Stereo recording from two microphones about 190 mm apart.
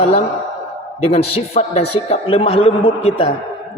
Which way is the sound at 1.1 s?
35° left (ahead or behind).